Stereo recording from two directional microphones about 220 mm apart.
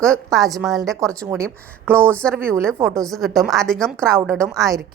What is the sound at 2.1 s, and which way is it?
A woman's voice, 5° left (ahead or behind).